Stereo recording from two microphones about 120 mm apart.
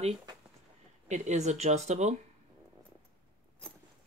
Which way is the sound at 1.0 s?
75° right (ahead or behind).